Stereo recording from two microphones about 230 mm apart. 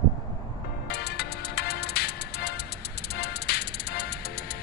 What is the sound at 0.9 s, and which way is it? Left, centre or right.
Music, left.